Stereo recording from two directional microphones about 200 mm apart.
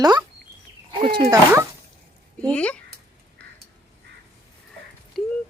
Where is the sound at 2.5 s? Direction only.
5° left (ahead or behind).